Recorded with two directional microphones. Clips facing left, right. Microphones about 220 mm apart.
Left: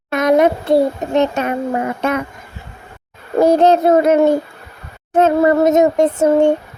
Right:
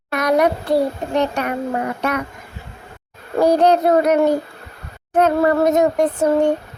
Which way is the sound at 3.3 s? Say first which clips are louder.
Left 3 dB; 25° left (ahead or behind).